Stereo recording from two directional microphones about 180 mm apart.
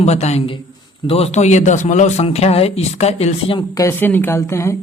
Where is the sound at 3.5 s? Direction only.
15° left (ahead or behind).